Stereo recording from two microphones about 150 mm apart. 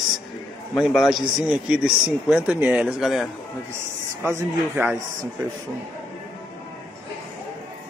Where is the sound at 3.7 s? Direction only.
15° right (ahead or behind).